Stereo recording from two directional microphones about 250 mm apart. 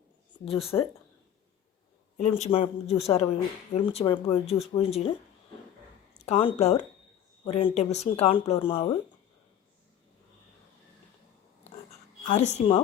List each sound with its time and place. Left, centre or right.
0.7 s speech: centre
2.4 s speech: left
6.1 s speech: left
11.9 s a sound: left